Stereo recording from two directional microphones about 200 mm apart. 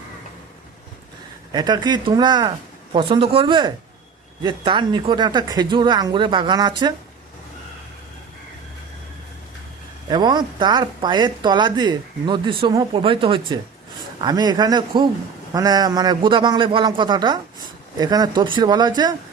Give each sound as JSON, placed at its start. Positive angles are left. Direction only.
{"t": 1.5, "sound": "speech", "side_deg": -20}
{"t": 10.1, "sound": "speech", "side_deg": -20}